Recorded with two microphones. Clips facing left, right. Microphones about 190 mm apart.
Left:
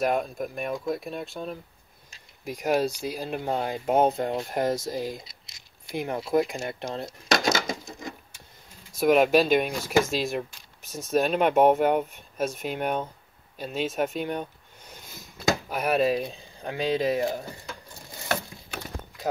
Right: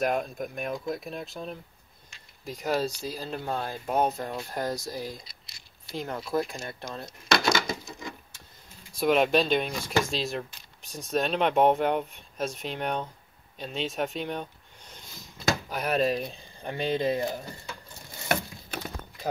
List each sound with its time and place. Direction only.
0.0 s speech: centre (ahead or behind); by 7.2 s 25° left (ahead or behind)
7.2 s a sound: 45° left (ahead or behind)
9.0 s speech: 5° left (ahead or behind)